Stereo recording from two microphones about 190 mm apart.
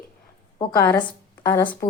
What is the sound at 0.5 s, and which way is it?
A woman's voice, 15° left (ahead or behind).